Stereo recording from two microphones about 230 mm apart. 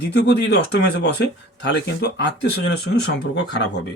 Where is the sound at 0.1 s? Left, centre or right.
Left.